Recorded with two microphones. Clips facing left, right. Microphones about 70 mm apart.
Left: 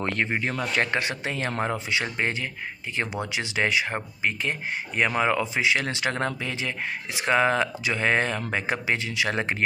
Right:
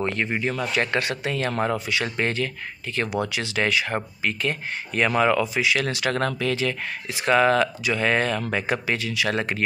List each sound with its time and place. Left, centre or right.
0.0 s speech: left
0.9 s speech: left